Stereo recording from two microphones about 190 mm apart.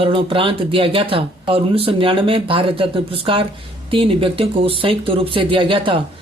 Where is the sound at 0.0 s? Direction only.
25° right (ahead or behind).